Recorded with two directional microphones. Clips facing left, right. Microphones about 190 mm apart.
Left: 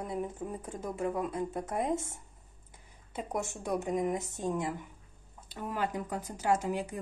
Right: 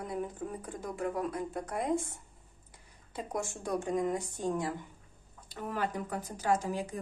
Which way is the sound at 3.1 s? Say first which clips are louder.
Left 1 dB; 20° left (ahead or behind).